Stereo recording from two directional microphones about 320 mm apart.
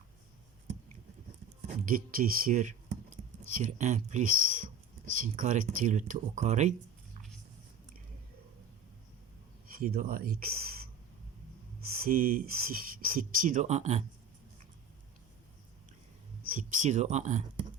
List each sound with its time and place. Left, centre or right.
1.6 s a sound: right
2.0 s speech: right
9.7 s speech: right
11.9 s speech: right
16.5 s speech: right